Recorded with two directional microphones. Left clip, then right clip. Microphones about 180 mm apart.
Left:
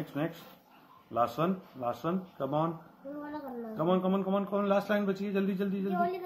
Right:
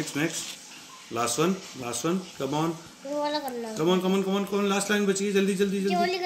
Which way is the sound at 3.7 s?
5° right (ahead or behind).